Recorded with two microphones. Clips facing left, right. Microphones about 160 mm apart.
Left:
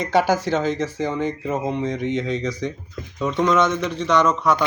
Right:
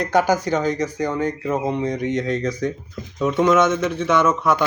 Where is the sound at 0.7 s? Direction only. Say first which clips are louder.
Right 1 dB; centre (ahead or behind).